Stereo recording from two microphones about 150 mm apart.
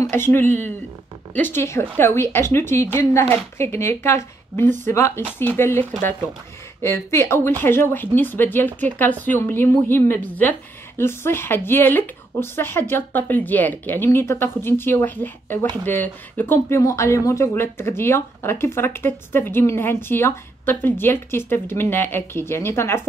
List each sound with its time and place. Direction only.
0.0 s speech: 15° left (ahead or behind)